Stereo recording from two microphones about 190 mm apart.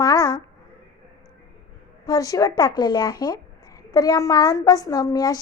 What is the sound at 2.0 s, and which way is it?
A woman's voice, 20° left (ahead or behind).